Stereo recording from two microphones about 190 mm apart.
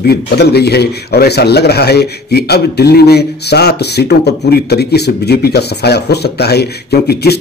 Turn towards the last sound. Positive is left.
turn(degrees=60)  # may be behind; listen again after turning